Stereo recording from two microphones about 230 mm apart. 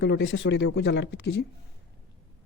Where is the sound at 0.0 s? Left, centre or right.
Left.